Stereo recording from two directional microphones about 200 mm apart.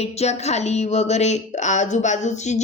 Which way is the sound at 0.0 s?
30° left (ahead or behind).